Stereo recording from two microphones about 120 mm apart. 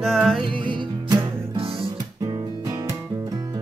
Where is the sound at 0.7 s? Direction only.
40° right (ahead or behind).